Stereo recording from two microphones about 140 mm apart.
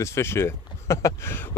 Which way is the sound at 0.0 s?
20° left (ahead or behind).